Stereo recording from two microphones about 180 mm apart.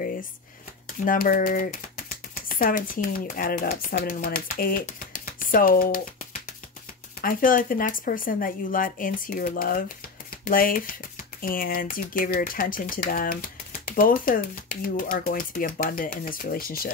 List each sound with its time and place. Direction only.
0.8 s speech: 50° left (ahead or behind)
7.2 s speech: 50° left (ahead or behind)